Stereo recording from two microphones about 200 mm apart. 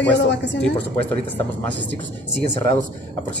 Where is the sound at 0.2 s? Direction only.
60° left (ahead or behind).